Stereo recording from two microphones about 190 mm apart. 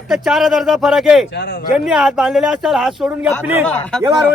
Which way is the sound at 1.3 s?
60° left (ahead or behind).